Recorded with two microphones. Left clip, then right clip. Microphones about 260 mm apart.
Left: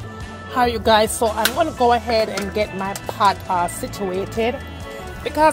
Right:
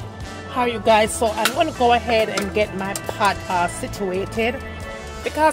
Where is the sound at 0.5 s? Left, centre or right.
Left.